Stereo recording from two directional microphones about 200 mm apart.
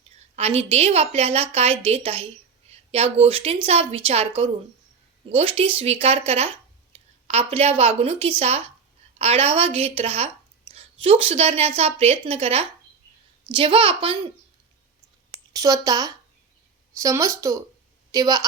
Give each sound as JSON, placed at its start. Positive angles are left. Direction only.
{"t": 0.3, "sound": "a woman's voice", "side_deg": -30}
{"t": 15.5, "sound": "speech", "side_deg": -20}